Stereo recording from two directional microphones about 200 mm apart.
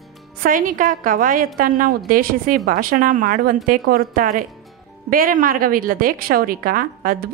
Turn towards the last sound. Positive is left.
turn(degrees=-45)  # may be behind; listen again after turning